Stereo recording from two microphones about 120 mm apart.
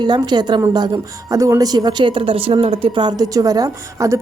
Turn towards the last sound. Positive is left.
turn(degrees=-30)  # may be behind; listen again after turning